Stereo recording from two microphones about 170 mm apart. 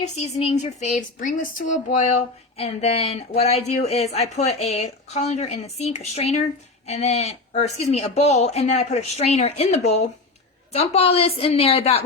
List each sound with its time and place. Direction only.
0.0 s speech: 40° left (ahead or behind)